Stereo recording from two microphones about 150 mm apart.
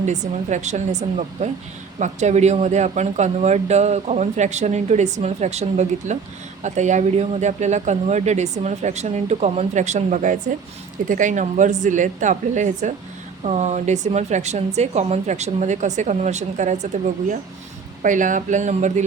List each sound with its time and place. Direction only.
0.0 s a woman's voice: 50° right (ahead or behind)
18.0 s a woman's voice: 60° right (ahead or behind)